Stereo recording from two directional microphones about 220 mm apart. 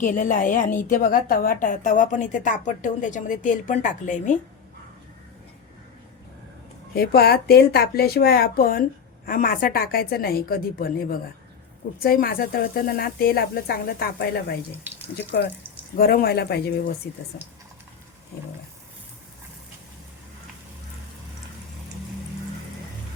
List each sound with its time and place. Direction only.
0.0 s a woman's voice: 35° left (ahead or behind)
6.9 s a woman's voice: 45° left (ahead or behind)
16.0 s a woman's voice: 40° left (ahead or behind)